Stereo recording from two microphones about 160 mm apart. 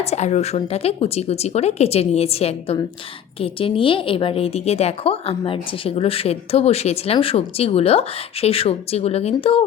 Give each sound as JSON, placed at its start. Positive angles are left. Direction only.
{"t": 0.0, "sound": "a woman's voice", "side_deg": 45}